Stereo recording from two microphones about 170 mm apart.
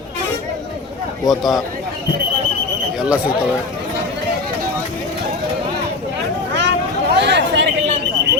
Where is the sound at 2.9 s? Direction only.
5° right (ahead or behind).